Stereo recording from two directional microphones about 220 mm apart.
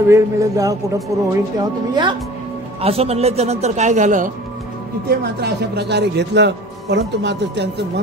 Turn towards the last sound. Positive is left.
turn(degrees=-50)  # may be behind; listen again after turning